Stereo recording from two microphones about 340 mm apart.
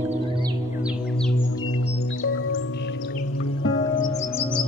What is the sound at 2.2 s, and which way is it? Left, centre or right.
Music, left.